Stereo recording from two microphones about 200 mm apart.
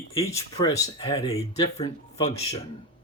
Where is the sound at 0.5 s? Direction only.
30° left (ahead or behind).